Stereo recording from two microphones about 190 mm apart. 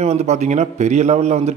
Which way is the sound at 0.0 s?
35° right (ahead or behind).